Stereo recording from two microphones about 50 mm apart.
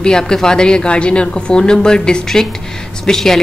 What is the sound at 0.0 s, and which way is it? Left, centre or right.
A woman's voice, centre.